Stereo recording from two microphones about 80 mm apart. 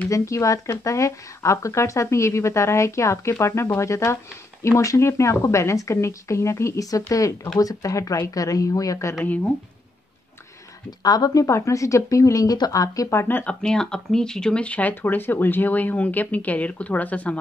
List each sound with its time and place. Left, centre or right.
0.1 s speech: left
9.2 s speech: centre
11.0 s speech: left
13.2 s speech: left
13.5 s speech: centre